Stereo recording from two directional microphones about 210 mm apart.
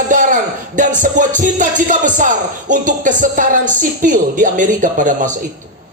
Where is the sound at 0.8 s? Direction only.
35° right (ahead or behind).